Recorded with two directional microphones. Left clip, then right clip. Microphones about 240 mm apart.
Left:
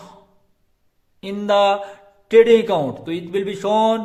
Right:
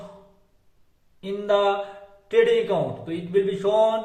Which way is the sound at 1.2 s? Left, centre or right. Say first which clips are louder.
Left 5 dB; left.